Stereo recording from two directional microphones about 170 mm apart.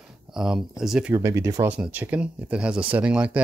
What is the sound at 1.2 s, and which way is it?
Speech, 15° right (ahead or behind).